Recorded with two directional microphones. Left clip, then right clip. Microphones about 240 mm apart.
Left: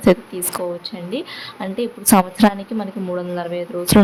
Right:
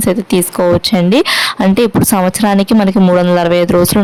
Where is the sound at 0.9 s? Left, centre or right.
Right.